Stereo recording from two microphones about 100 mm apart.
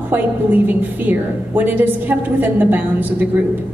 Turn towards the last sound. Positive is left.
turn(degrees=-20)  # may be behind; listen again after turning